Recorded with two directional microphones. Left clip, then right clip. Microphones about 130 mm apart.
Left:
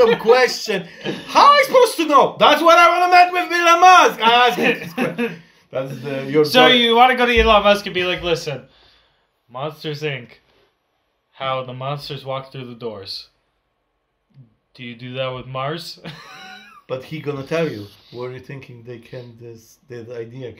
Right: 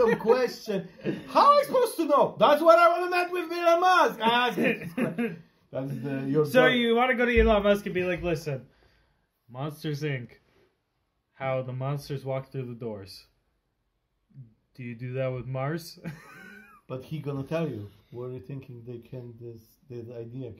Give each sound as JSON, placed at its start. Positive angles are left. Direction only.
{"t": 0.2, "sound": "a man's voice", "side_deg": -5}
{"t": 4.6, "sound": "speech", "side_deg": -50}
{"t": 5.3, "sound": "speech", "side_deg": -5}
{"t": 6.5, "sound": "a man's voice", "side_deg": -50}
{"t": 7.7, "sound": "speech", "side_deg": -60}
{"t": 8.1, "sound": "speech", "side_deg": -70}
{"t": 10.0, "sound": "speech", "side_deg": -90}
{"t": 14.7, "sound": "speech", "side_deg": -85}
{"t": 16.8, "sound": "a man's voice", "side_deg": -10}